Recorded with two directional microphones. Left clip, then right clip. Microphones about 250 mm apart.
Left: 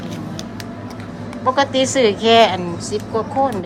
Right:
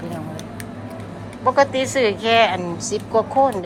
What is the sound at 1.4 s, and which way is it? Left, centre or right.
A woman's voice, centre.